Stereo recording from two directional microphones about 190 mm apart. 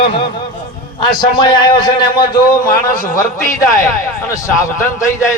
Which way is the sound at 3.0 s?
45° left (ahead or behind).